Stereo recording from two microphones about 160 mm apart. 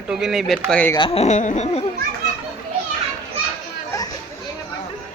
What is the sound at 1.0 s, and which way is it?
Speech, 35° left (ahead or behind).